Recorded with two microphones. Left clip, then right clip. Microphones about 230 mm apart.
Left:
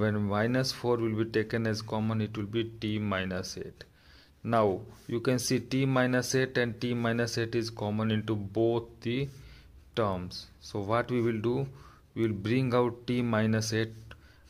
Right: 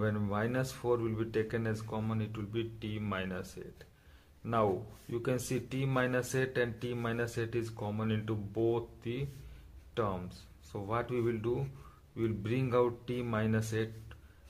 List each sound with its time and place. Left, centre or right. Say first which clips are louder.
0.0 s speech: left 5 dB; left